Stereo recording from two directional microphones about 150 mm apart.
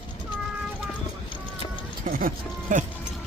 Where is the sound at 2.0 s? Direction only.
70° right (ahead or behind).